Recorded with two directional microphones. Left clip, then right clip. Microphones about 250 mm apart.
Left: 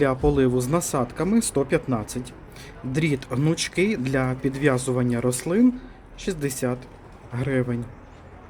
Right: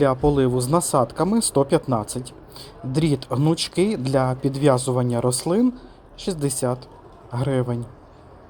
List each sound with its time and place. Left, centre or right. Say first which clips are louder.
0.0 s speech: right 2 dB; centre